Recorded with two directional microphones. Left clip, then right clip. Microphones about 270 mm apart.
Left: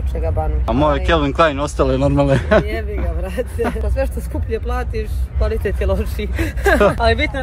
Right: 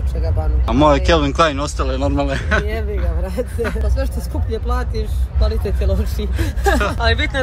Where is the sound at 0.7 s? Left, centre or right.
Centre.